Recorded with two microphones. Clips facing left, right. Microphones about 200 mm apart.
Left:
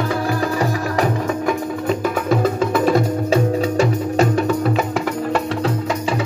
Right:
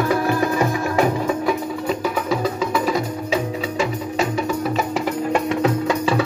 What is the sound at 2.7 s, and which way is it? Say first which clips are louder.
Music: left 5 dB; 50° left (ahead or behind).